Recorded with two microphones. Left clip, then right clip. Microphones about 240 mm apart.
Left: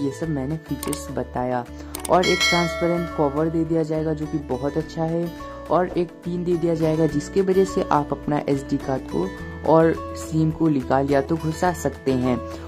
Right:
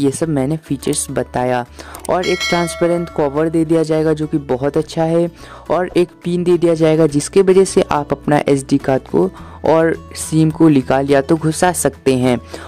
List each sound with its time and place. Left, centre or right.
0.0 s speech: right
2.2 s speech: centre
3.2 s speech: right